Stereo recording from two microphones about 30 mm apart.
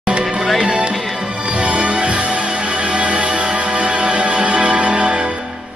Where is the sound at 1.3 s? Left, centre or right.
Right.